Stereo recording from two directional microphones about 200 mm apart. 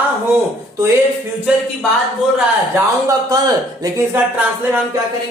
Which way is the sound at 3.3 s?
20° right (ahead or behind).